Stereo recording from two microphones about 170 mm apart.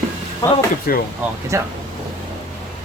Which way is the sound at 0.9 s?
60° left (ahead or behind).